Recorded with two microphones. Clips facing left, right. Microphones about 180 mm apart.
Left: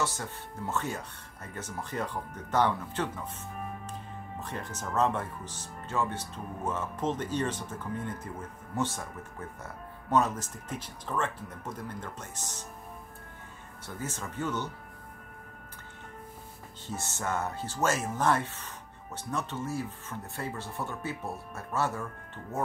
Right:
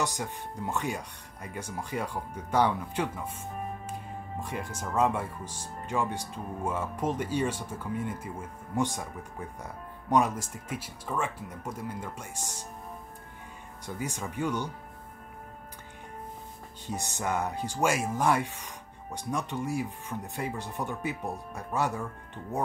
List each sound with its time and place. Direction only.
0.0 s speech: 15° right (ahead or behind)
4.4 s speech: 10° right (ahead or behind)
13.8 s speech: 15° right (ahead or behind)
16.8 s speech: 15° right (ahead or behind)